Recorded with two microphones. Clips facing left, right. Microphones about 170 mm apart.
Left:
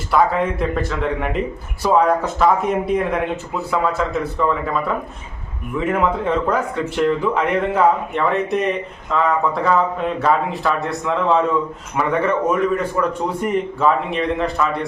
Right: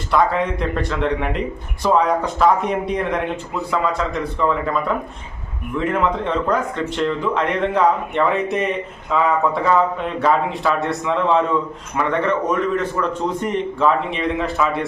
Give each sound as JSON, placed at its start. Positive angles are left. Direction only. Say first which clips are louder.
{"t": 0.1, "sound": "speech", "louder": "left 1 dB", "side_deg": 5}